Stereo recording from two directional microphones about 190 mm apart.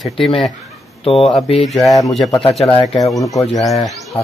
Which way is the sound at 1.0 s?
30° left (ahead or behind).